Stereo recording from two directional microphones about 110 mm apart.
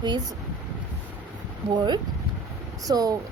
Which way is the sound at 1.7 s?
40° right (ahead or behind).